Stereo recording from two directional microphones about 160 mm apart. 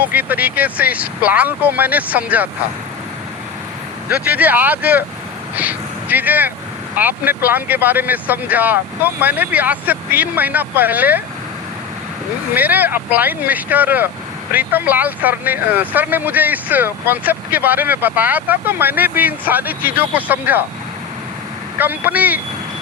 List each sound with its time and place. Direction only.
0.0 s speech: 10° right (ahead or behind)
4.1 s speech: 10° right (ahead or behind)
12.5 s speech: 10° right (ahead or behind)
21.8 s speech: 10° right (ahead or behind)